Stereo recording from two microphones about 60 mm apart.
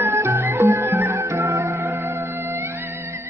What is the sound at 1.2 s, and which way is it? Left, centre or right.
Music, right.